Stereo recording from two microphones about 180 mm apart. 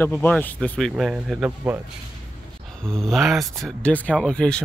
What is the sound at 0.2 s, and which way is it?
Speech, 10° left (ahead or behind).